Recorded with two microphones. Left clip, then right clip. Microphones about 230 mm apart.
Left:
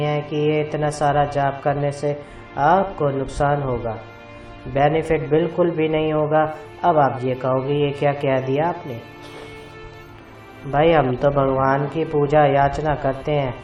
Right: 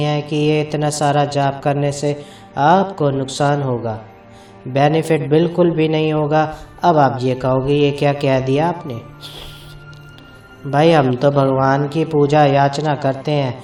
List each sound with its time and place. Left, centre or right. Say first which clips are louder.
0.0 s music: right 2 dB; right
0.3 s a man's voice: right 3 dB; right
10.7 s a man's voice: right 3 dB; right
13.2 s a man's voice: right 2 dB; right